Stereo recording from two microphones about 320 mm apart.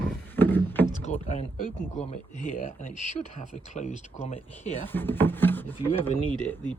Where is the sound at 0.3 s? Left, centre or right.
Centre.